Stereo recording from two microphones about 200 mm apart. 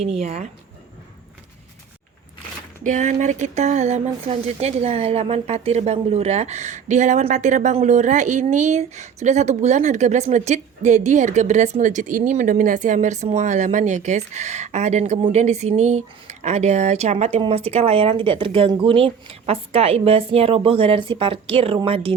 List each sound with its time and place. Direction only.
0.0 s speech: 30° right (ahead or behind)
2.8 s speech: 40° right (ahead or behind)